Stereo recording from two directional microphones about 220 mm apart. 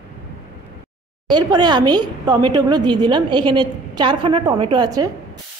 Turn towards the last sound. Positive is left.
turn(degrees=-15)  # may be behind; listen again after turning